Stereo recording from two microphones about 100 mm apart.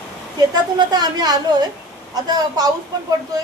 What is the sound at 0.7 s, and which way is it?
A woman's voice, 45° right (ahead or behind).